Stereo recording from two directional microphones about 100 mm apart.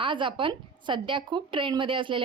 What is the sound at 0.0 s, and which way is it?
A woman's voice, 55° right (ahead or behind).